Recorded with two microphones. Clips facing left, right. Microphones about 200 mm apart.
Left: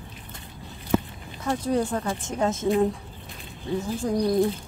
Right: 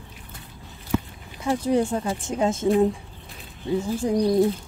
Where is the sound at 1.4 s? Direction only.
10° right (ahead or behind).